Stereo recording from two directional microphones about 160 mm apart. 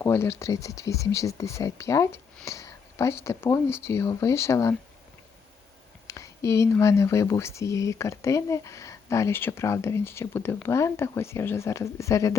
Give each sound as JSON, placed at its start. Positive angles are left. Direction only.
{"t": 0.0, "sound": "speech", "side_deg": 15}
{"t": 6.1, "sound": "speech", "side_deg": 20}